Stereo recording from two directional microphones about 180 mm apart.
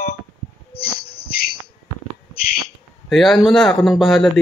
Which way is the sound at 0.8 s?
60° left (ahead or behind).